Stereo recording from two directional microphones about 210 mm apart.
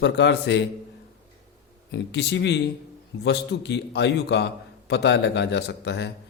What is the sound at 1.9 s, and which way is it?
A man's voice, 55° left (ahead or behind).